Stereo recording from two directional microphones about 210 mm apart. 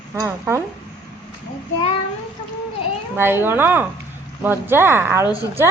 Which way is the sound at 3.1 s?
10° right (ahead or behind).